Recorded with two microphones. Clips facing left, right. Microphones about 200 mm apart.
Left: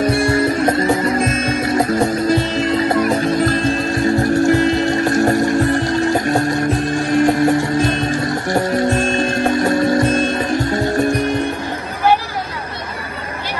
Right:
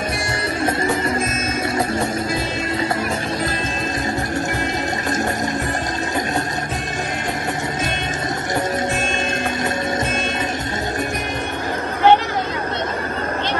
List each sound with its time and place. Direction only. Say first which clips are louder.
4.4 s music: left 9 dB; 20° right (ahead or behind)
9.0 s music: left 6 dB; 45° left (ahead or behind)